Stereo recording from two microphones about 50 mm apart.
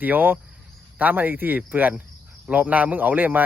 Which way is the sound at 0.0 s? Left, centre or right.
Right.